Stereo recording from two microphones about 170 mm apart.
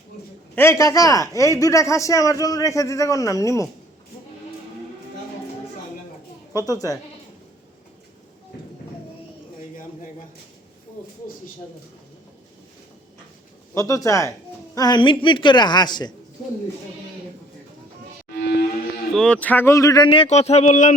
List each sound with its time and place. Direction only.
0.5 s a man's voice: 15° left (ahead or behind)
6.5 s a man's voice: 20° left (ahead or behind)
13.7 s a man's voice: 20° left (ahead or behind)
18.3 s music: 70° left (ahead or behind)
19.1 s a man's voice: 5° left (ahead or behind); by 20.9 s 45° left (ahead or behind)